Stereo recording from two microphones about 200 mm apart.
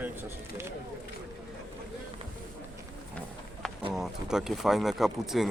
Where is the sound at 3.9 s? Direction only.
Centre (ahead or behind).